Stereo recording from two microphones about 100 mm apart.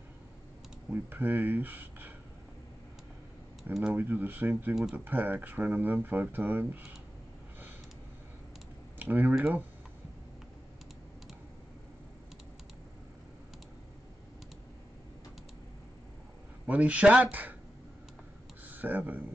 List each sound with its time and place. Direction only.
0.8 s speech: 20° right (ahead or behind)
3.9 s speech: 20° right (ahead or behind)
8.9 s speech: 15° right (ahead or behind)
16.6 s speech: 15° right (ahead or behind)
18.7 s speech: 15° right (ahead or behind)